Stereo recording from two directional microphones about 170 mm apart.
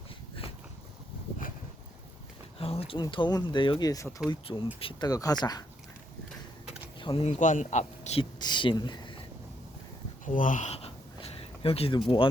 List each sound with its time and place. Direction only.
2.6 s speech: 35° left (ahead or behind)
7.0 s speech: 35° left (ahead or behind)
8.2 s speech: 25° left (ahead or behind)
10.2 s a sound: 50° left (ahead or behind); by 12.0 s 35° left (ahead or behind)